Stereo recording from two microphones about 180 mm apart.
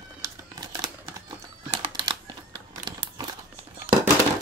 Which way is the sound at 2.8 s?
25° right (ahead or behind).